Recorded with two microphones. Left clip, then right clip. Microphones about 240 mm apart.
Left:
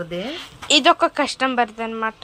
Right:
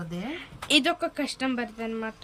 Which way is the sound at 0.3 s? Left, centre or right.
Centre.